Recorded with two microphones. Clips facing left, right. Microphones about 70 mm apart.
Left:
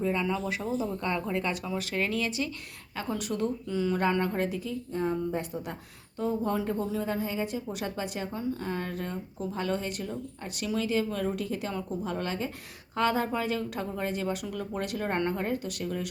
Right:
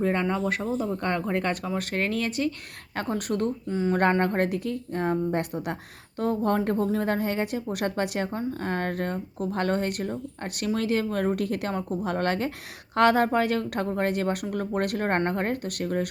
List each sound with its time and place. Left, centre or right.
0.0 s speech: right
3.7 s speech: right
3.9 s a woman's voice: right